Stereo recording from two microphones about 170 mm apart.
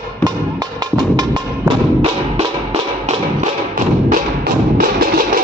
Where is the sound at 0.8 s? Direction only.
25° right (ahead or behind).